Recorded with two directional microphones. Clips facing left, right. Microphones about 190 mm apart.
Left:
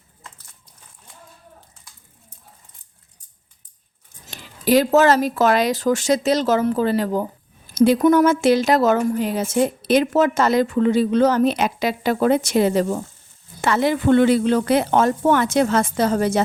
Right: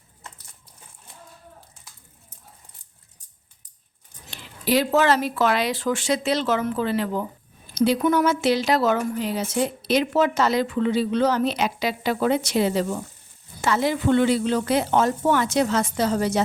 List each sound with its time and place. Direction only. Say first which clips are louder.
4.3 s speech: left 5 dB; 45° left (ahead or behind)
13.6 s speech: left 3 dB; 60° left (ahead or behind)